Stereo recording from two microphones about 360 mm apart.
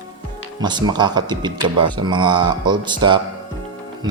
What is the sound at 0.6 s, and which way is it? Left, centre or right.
Speech, centre.